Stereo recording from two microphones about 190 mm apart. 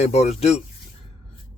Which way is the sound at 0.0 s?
35° left (ahead or behind).